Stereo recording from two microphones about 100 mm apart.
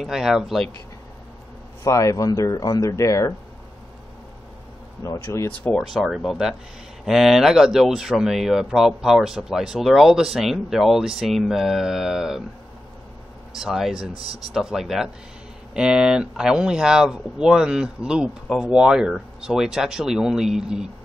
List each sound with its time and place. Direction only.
0.0 s speech: 5° right (ahead or behind)
1.8 s speech: 30° left (ahead or behind)
5.0 s speech: 30° left (ahead or behind)
5.5 s speech: 15° left (ahead or behind)
5.8 s speech: 5° right (ahead or behind)
13.6 s speech: 5° right (ahead or behind)